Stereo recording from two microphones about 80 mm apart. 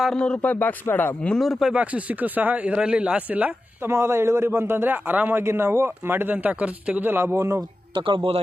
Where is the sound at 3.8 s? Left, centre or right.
Right.